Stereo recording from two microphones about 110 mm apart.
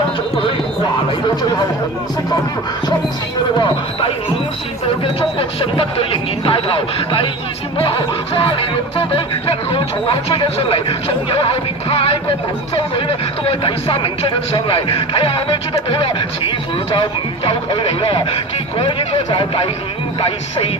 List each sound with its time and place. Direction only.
1.4 s chatter: 35° left (ahead or behind)
5.4 s music: 55° left (ahead or behind)
15.9 s speech: 50° left (ahead or behind)